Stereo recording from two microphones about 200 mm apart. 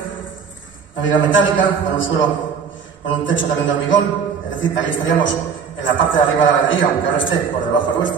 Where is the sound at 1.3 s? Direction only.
70° left (ahead or behind).